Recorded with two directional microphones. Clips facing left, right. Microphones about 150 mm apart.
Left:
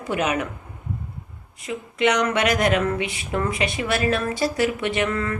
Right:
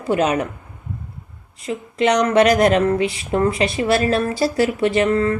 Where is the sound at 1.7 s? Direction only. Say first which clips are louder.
Right 3 dB; 35° right (ahead or behind).